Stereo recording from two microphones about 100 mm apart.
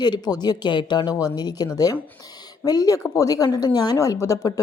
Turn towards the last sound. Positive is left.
turn(degrees=35)  # may be behind; listen again after turning